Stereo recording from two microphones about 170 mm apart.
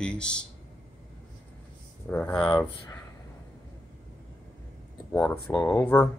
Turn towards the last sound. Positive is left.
turn(degrees=5)  # may be behind; listen again after turning